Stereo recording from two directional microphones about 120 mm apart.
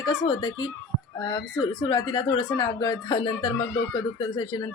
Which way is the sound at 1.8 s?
35° left (ahead or behind).